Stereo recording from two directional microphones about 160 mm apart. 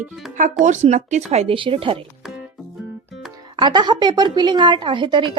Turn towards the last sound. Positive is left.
turn(degrees=-30)  # may be behind; listen again after turning